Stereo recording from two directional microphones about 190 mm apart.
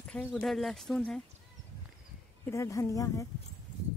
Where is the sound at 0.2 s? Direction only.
Centre (ahead or behind).